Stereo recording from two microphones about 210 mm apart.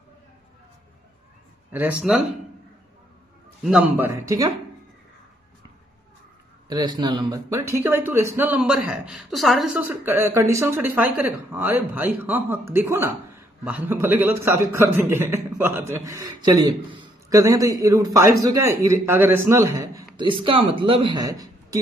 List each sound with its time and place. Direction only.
1.7 s speech: 10° right (ahead or behind)
3.6 s speech: 10° right (ahead or behind)
6.7 s speech: 20° right (ahead or behind)